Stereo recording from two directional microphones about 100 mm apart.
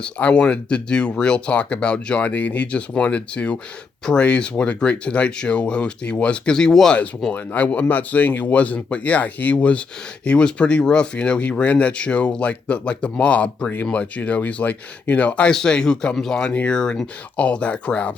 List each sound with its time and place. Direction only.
0.0 s speech: 10° left (ahead or behind)